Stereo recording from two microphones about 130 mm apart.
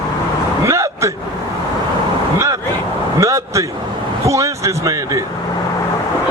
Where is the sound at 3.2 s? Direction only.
25° right (ahead or behind).